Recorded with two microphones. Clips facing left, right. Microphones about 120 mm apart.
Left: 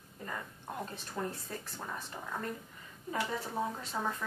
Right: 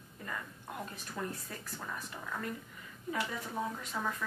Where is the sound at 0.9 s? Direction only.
30° left (ahead or behind).